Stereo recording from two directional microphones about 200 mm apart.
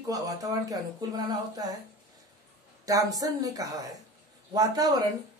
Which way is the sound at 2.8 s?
15° right (ahead or behind).